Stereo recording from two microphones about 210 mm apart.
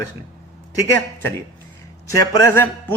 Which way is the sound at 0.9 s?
10° left (ahead or behind).